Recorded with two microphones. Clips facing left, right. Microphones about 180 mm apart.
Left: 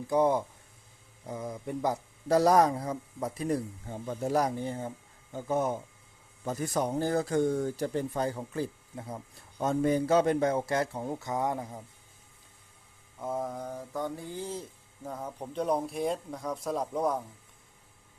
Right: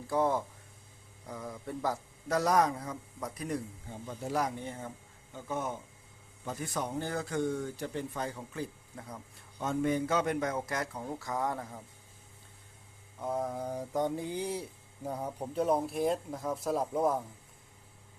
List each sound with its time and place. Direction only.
0.1 s speech: 20° left (ahead or behind)
2.2 s a man's voice: 30° left (ahead or behind)
4.0 s a man's voice: 50° left (ahead or behind); by 11.8 s 20° left (ahead or behind)
13.1 s a sound: centre (ahead or behind)